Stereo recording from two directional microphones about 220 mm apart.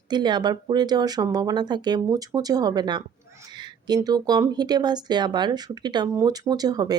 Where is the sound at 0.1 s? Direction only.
20° right (ahead or behind).